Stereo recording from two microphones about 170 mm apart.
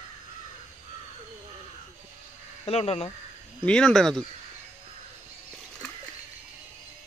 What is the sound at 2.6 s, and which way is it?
Speech, 35° left (ahead or behind).